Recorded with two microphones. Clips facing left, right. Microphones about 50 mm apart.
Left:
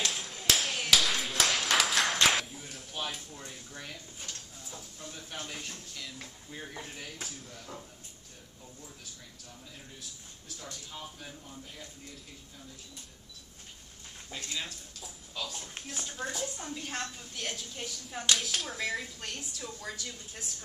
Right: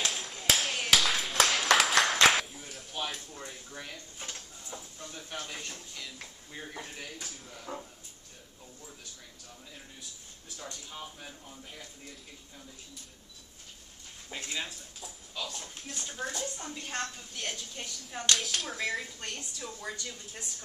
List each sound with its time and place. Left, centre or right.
0.0 s clapping: centre
3.3 s a sound: centre
5.0 s a woman's voice: centre
10.6 s speech: centre
14.3 s speech: centre
15.0 s a sound: centre
16.1 s a woman's voice: centre